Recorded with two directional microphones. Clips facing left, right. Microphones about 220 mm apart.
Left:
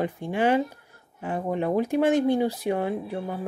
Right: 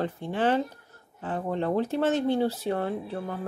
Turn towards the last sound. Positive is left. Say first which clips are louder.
# left 2 dB
turn(degrees=10)  # may be behind; listen again after turning